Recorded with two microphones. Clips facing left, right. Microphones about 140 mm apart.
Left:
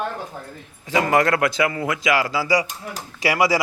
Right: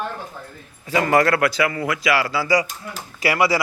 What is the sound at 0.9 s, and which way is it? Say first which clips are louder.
A man's voice: right 1 dB; 20° left (ahead or behind).